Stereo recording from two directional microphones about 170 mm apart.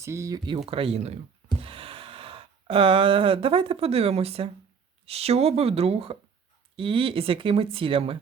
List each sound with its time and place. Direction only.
0.0 s speech: 15° right (ahead or behind); by 1.2 s 40° right (ahead or behind)
1.6 s a sound: 35° right (ahead or behind)
5.0 s speech: 35° right (ahead or behind)